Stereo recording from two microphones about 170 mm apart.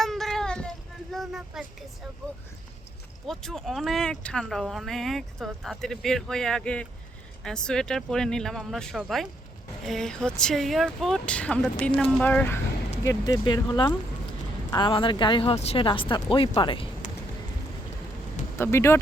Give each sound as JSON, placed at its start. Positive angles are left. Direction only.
{"t": 0.0, "sound": "child singing", "side_deg": 0}
{"t": 1.1, "sound": "a sound", "side_deg": 0}
{"t": 3.2, "sound": "speech", "side_deg": 0}
{"t": 13.1, "sound": "speech", "side_deg": 20}
{"t": 18.5, "sound": "speech", "side_deg": 15}